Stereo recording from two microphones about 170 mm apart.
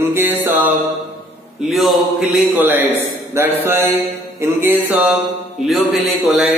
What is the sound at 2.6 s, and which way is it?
Speech, 10° right (ahead or behind).